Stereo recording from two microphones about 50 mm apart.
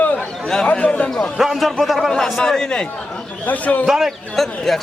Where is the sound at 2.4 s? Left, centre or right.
Centre.